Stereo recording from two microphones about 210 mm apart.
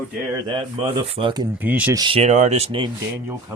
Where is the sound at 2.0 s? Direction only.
25° right (ahead or behind).